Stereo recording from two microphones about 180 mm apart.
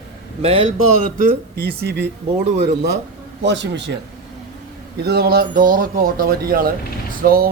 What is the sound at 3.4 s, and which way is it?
Speech, 75° right (ahead or behind).